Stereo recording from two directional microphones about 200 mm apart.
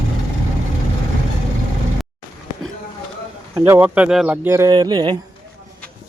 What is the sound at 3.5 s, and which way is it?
Speech, 10° right (ahead or behind).